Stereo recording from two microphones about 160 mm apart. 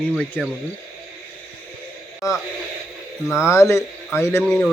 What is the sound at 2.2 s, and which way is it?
Speech, 20° left (ahead or behind).